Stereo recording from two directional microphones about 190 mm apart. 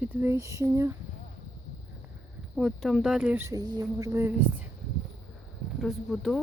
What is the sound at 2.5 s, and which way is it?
Speech, centre (ahead or behind).